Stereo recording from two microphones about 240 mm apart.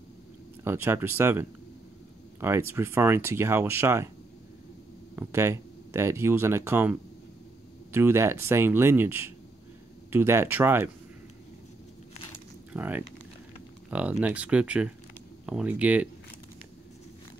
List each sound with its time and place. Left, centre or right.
0.7 s speech: centre
5.1 s speech: centre
12.1 s a sound: left
12.7 s speech: centre